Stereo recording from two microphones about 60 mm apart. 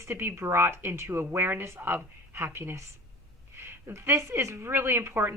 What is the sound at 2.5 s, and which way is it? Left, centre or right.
Speech, right.